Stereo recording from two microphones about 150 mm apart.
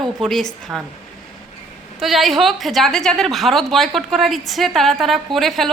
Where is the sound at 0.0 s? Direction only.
Centre (ahead or behind).